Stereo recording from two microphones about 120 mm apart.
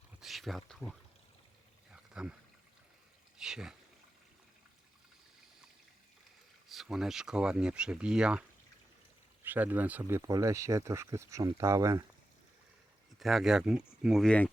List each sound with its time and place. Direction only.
0.2 s speech: centre (ahead or behind)
1.9 s a sound: 5° right (ahead or behind)
3.3 s speech: 5° right (ahead or behind)
6.7 s speech: centre (ahead or behind); by 12.0 s 25° right (ahead or behind)
13.1 s speech: centre (ahead or behind)
14.3 s speech: 10° left (ahead or behind)